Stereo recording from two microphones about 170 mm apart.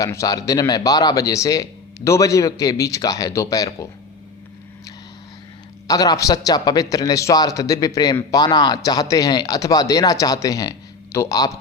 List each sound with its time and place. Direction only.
0.0 s a man's voice: 20° left (ahead or behind)
5.9 s a man's voice: 20° left (ahead or behind)